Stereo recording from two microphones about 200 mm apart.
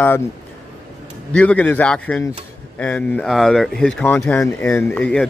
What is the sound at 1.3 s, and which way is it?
A man's voice, 5° left (ahead or behind).